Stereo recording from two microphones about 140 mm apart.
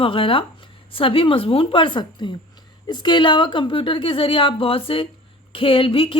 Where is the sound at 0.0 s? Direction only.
40° left (ahead or behind).